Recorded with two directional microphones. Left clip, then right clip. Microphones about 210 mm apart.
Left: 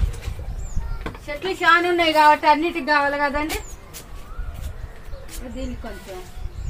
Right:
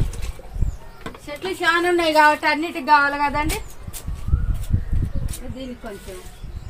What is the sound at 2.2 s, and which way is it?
A woman's voice, 45° right (ahead or behind).